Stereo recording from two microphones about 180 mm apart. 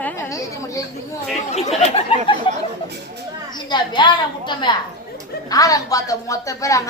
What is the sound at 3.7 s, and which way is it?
A woman's voice, 25° left (ahead or behind).